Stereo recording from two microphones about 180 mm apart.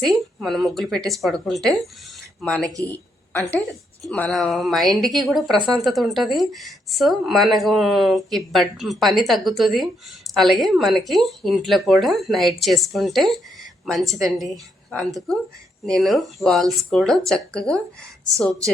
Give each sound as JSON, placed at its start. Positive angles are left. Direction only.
{"t": 0.0, "sound": "a woman's voice", "side_deg": 0}
{"t": 2.6, "sound": "speech", "side_deg": -20}
{"t": 2.9, "sound": "a woman's voice", "side_deg": 10}